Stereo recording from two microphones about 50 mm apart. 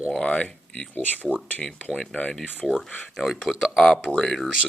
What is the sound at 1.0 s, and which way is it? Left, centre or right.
Speech, left.